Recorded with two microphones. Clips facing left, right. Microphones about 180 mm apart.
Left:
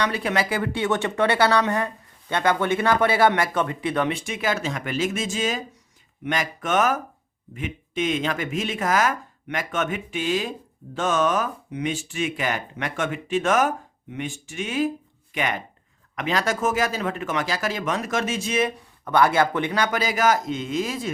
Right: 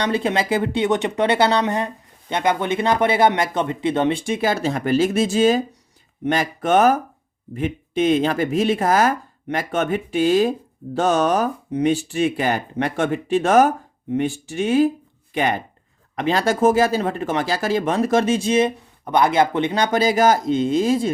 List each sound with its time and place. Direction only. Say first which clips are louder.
0.0 s speech: right 3 dB; 25° right (ahead or behind)